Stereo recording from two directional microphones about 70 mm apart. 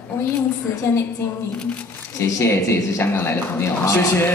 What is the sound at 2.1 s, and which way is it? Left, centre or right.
A woman's voice, left.